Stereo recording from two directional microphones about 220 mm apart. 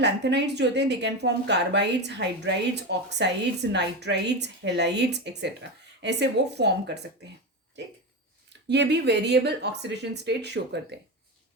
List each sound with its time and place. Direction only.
0.0 s a woman's voice: 50° right (ahead or behind)
8.4 s a woman's voice: 50° right (ahead or behind)